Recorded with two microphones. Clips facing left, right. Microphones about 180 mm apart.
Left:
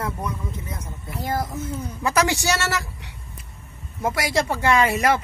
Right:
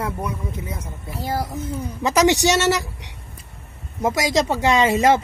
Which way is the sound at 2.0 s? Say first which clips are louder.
Right 5 dB; 20° right (ahead or behind).